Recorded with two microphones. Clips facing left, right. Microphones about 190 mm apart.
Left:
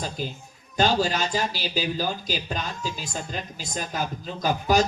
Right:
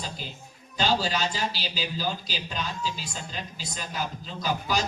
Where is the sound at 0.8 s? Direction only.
50° left (ahead or behind).